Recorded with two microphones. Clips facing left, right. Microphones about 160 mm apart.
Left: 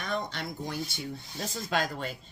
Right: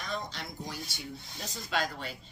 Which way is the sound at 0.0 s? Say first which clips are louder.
Left 4 dB; 60° left (ahead or behind).